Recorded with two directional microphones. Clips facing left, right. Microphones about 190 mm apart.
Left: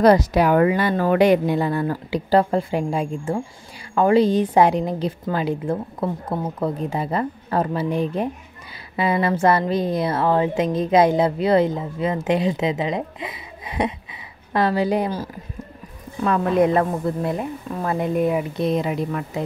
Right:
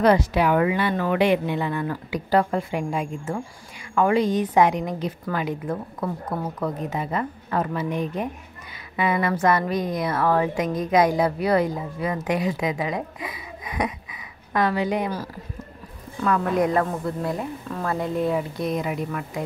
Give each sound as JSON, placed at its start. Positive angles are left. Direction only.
{"t": 0.0, "sound": "a woman's voice", "side_deg": 40}
{"t": 18.7, "sound": "speech", "side_deg": 25}